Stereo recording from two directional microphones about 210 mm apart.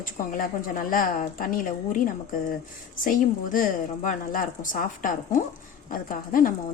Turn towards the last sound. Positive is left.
turn(degrees=40)  # may be behind; listen again after turning